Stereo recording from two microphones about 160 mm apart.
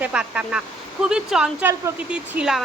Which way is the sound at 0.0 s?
5° right (ahead or behind).